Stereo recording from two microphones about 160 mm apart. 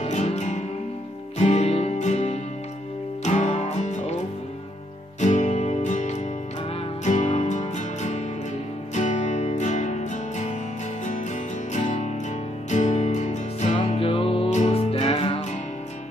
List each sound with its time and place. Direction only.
0.0 s music: 45° left (ahead or behind)
5.2 s music: 50° left (ahead or behind)
11.7 s music: 45° left (ahead or behind)